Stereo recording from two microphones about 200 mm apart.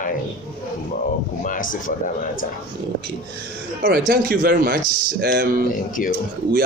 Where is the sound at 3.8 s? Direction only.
45° right (ahead or behind).